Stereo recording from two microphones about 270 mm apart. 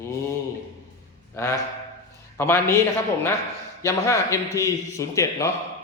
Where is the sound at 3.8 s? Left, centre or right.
Centre.